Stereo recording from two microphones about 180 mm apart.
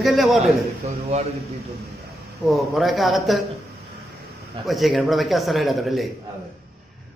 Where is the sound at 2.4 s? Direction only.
Centre (ahead or behind).